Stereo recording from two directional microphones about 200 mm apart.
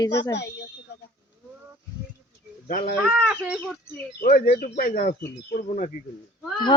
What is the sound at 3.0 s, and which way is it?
Speech, 5° right (ahead or behind).